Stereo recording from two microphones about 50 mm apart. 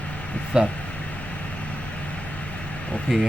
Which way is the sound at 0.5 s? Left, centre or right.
Centre.